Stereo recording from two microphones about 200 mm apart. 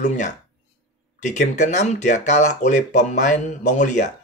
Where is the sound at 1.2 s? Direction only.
35° left (ahead or behind).